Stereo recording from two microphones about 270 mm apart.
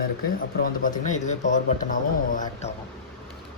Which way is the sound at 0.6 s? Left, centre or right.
Left.